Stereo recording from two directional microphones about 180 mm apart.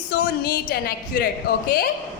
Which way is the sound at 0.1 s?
60° left (ahead or behind).